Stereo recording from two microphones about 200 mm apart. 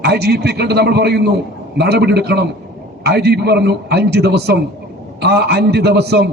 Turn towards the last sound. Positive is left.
turn(degrees=-55)  # may be behind; listen again after turning